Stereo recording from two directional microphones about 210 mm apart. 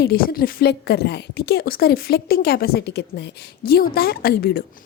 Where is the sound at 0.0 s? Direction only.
45° left (ahead or behind).